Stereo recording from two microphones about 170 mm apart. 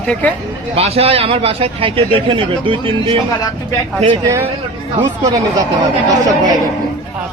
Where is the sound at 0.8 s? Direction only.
35° right (ahead or behind); by 6.3 s 20° right (ahead or behind).